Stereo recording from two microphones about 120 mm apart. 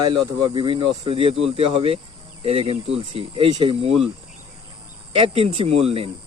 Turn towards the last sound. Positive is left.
turn(degrees=-55)  # may be behind; listen again after turning